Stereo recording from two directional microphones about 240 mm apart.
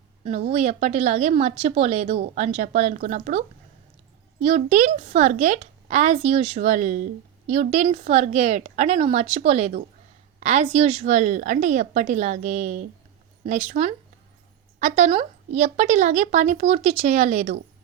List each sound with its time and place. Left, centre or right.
0.3 s speech: right
4.4 s speech: right